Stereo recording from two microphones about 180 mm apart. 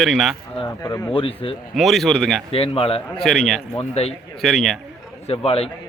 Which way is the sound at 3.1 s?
5° left (ahead or behind).